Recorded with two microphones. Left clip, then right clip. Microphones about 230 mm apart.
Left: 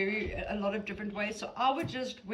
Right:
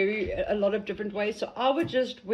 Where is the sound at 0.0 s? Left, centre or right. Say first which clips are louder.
Right 6 dB; centre.